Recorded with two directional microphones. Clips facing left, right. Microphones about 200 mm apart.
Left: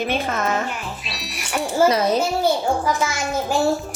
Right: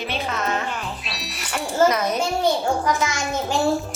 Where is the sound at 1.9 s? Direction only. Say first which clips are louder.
Left 4 dB; 30° left (ahead or behind).